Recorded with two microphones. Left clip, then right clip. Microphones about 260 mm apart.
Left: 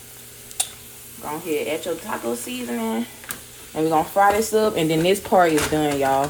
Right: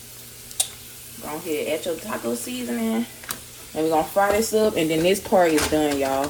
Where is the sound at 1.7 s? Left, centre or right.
Left.